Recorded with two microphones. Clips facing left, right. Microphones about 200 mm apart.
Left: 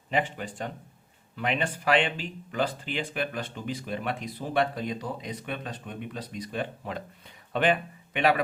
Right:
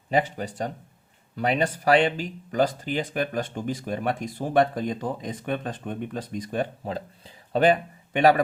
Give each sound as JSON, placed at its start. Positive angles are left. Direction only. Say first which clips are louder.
{"t": 0.1, "sound": "speech", "louder": "right 4 dB", "side_deg": -40}
{"t": 6.8, "sound": "speech", "louder": "right 4 dB", "side_deg": -30}